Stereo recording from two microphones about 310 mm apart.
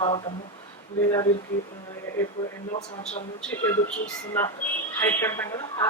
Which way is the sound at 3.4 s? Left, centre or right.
Centre.